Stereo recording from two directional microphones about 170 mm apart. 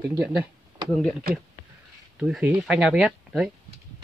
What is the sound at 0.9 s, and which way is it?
Speech, 5° left (ahead or behind).